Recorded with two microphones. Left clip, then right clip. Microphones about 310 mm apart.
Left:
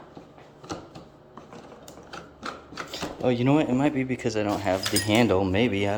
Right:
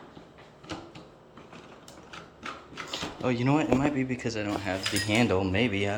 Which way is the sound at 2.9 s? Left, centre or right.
Centre.